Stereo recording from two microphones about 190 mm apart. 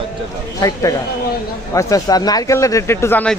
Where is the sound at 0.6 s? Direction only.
20° left (ahead or behind).